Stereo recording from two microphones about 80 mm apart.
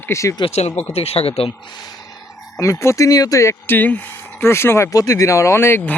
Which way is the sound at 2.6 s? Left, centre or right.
Left.